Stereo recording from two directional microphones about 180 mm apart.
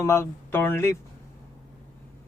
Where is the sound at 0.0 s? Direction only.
15° left (ahead or behind).